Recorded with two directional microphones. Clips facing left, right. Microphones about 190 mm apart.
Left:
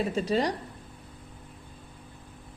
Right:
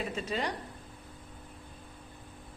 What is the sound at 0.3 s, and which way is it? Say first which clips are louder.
Speech: left 8 dB; 35° left (ahead or behind).